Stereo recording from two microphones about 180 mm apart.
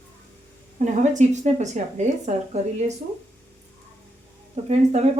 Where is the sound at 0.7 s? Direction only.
40° right (ahead or behind).